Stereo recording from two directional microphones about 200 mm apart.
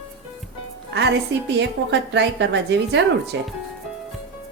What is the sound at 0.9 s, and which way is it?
A woman's voice, 60° right (ahead or behind).